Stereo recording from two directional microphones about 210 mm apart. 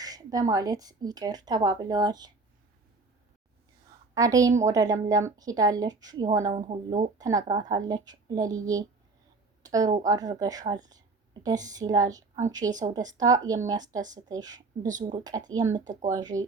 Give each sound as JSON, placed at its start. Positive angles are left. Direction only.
{"t": 0.0, "sound": "a woman's voice", "side_deg": -15}
{"t": 4.1, "sound": "speech", "side_deg": -15}
{"t": 6.5, "sound": "speech", "side_deg": -30}
{"t": 7.2, "sound": "a woman's voice", "side_deg": -15}
{"t": 15.7, "sound": "speech", "side_deg": -35}
{"t": 16.0, "sound": "speech", "side_deg": -15}